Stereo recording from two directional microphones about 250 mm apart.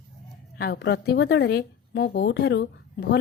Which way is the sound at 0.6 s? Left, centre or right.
Left.